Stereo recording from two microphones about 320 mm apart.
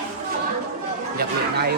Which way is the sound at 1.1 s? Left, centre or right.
Right.